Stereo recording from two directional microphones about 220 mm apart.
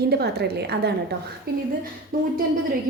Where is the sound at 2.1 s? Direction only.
40° right (ahead or behind).